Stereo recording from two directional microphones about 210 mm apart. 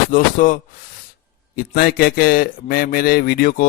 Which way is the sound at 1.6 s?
45° left (ahead or behind).